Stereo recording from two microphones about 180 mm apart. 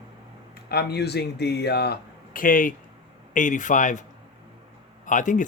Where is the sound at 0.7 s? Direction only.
65° left (ahead or behind); by 4.0 s 45° left (ahead or behind).